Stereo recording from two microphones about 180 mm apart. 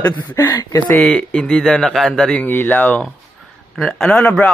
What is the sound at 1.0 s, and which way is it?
Speech, 5° left (ahead or behind).